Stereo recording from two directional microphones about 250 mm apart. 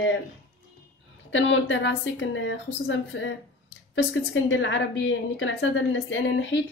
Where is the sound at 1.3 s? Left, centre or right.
Left.